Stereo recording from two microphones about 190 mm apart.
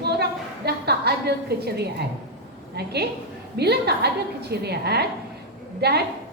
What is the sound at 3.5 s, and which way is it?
A woman's voice, 60° right (ahead or behind).